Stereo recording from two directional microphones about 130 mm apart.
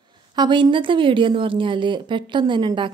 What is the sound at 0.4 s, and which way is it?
A woman's voice, 40° right (ahead or behind).